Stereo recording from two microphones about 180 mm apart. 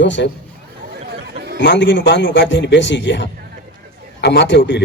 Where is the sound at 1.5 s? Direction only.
80° left.